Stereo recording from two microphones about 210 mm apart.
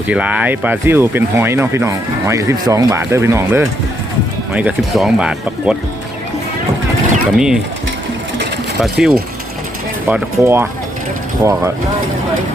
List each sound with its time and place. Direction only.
0.1 s speech: 5° right (ahead or behind)
7.3 s speech: 5° right (ahead or behind)
8.8 s speech: 5° right (ahead or behind)